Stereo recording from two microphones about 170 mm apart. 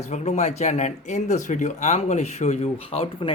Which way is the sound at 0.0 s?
40° left (ahead or behind).